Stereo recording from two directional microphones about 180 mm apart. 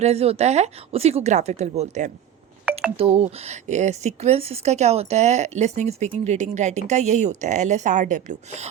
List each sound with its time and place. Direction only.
0.0 s speech: 35° right (ahead or behind)